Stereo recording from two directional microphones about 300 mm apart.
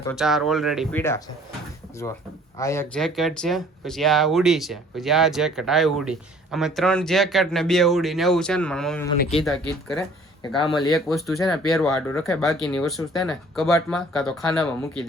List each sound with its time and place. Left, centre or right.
0.0 s speech: centre
2.6 s speech: centre
10.4 s speech: centre
10.8 s speech: centre